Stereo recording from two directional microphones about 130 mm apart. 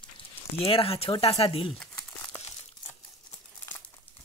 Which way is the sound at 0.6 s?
45° left (ahead or behind).